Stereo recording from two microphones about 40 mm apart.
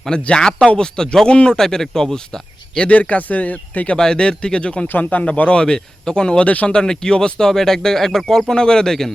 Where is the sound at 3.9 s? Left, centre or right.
Left.